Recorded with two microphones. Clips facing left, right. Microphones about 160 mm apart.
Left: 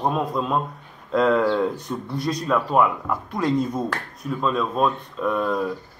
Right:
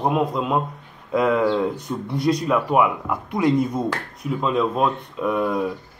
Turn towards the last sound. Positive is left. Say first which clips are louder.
# right 1 dB
turn(degrees=-10)  # may be behind; listen again after turning